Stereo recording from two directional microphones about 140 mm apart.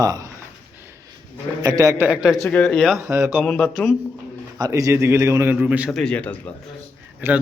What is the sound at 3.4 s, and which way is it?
Speech, 5° left (ahead or behind).